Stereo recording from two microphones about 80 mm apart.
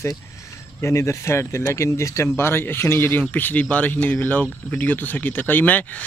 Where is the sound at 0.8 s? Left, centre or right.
Left.